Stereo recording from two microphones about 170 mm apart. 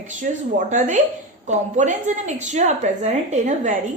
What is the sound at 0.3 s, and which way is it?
A woman's voice, 50° right (ahead or behind).